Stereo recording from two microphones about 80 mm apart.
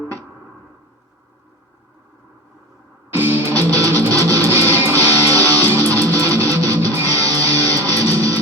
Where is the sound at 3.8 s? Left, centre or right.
Right.